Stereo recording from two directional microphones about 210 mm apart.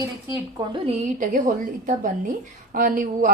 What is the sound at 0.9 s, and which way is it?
A woman's voice, 35° right (ahead or behind).